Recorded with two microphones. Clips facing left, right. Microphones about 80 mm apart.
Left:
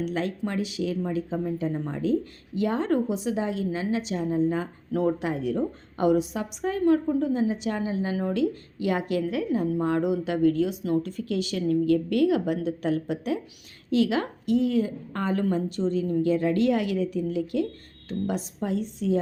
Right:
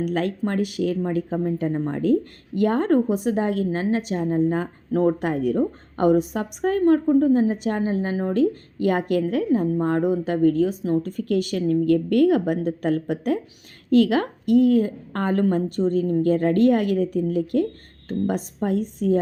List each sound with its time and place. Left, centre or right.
0.0 s a woman's voice: right